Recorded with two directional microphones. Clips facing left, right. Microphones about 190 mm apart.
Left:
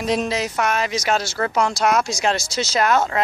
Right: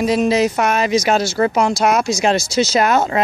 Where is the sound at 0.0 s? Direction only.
5° right (ahead or behind).